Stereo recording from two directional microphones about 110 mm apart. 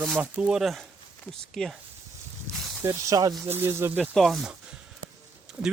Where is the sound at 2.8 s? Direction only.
30° right (ahead or behind).